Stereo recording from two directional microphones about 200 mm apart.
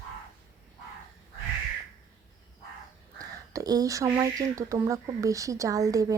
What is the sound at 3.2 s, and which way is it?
Speech, 20° right (ahead or behind).